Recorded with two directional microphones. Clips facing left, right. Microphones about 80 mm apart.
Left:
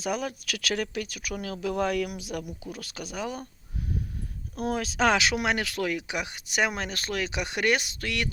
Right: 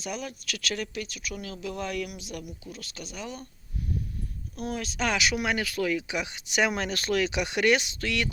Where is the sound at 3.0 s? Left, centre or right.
Left.